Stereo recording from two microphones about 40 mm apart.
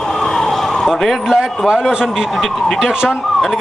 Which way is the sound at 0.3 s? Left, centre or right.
Centre.